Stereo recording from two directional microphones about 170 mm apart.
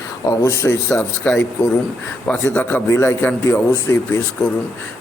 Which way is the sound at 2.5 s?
10° left (ahead or behind).